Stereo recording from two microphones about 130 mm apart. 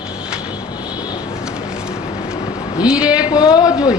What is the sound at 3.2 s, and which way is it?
Speech, 30° left (ahead or behind).